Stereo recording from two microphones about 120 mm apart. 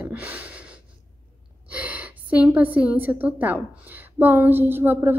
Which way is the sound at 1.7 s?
10° right (ahead or behind).